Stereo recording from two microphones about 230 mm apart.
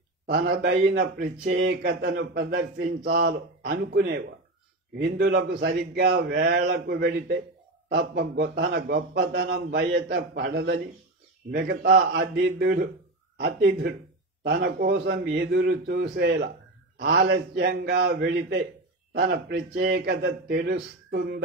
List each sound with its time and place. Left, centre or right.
0.3 s a man's voice: right